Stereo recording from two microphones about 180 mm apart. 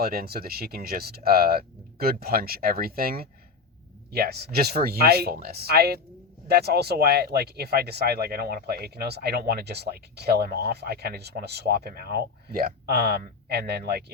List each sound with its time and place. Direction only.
0.0 s speech: 55° right (ahead or behind)